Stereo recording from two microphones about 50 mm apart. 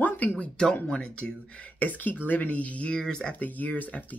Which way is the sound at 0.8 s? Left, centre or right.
Left.